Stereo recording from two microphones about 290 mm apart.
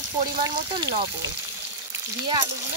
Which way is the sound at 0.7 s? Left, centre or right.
Centre.